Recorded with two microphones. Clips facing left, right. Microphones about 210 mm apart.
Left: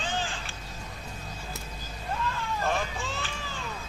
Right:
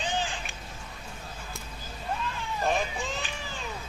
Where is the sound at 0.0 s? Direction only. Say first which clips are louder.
Right 1 dB; 15° right (ahead or behind).